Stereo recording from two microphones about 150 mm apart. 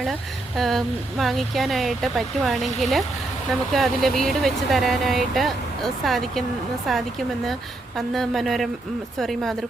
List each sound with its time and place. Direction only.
0.0 s speech: centre (ahead or behind)